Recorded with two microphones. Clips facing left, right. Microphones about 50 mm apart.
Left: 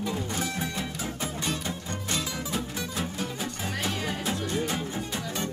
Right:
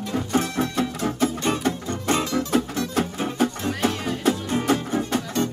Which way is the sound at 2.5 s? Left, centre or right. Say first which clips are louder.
Right 10 dB; right.